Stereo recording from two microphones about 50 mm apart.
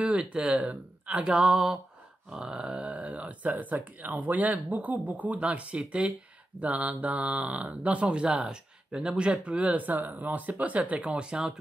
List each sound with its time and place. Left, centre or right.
0.1 s speech: centre
1.3 s grunt: centre
2.7 s speech: right